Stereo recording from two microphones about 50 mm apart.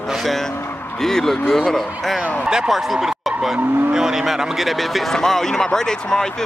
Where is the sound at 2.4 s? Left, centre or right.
Centre.